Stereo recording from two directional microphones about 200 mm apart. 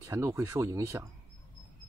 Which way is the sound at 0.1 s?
15° right (ahead or behind).